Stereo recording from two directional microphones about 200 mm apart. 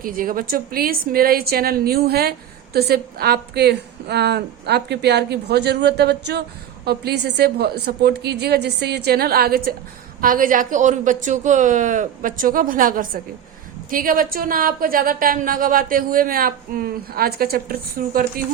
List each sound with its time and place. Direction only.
0.0 s a woman's voice: 45° right (ahead or behind)